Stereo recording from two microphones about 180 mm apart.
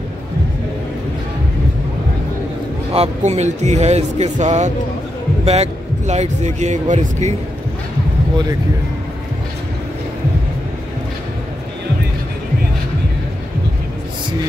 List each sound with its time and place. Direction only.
2.9 s a man's voice: 35° right (ahead or behind)